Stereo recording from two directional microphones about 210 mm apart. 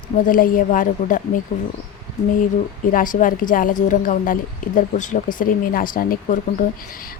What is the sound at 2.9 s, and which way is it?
A woman's voice, 40° left (ahead or behind).